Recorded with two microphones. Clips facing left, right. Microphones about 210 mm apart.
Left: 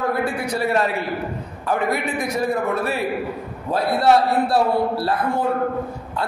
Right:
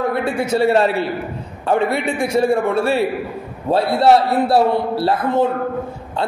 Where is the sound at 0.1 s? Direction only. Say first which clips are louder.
Right 4 dB; 25° right (ahead or behind).